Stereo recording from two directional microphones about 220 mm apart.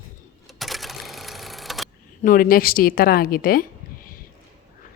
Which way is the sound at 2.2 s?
40° left (ahead or behind).